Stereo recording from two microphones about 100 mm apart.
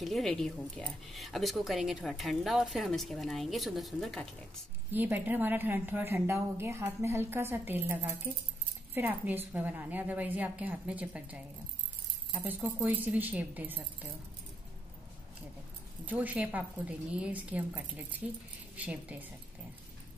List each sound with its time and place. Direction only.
0.0 s speech: 5° left (ahead or behind)
4.9 s a woman's voice: 20° right (ahead or behind)
16.1 s a woman's voice: 15° right (ahead or behind)